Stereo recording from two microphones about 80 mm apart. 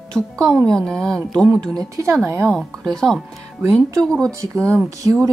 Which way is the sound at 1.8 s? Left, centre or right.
Right.